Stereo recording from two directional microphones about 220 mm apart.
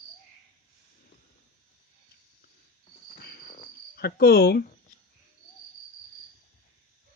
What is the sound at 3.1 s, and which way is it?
Cricket, 40° left (ahead or behind).